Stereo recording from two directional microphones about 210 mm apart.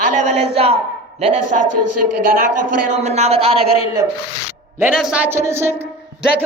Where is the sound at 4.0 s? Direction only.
15° right (ahead or behind).